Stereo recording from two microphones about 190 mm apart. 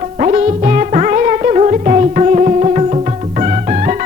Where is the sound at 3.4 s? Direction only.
40° right (ahead or behind).